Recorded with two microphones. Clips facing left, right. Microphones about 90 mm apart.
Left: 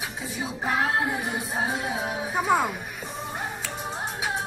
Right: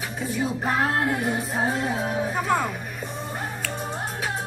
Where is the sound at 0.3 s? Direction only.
50° right (ahead or behind).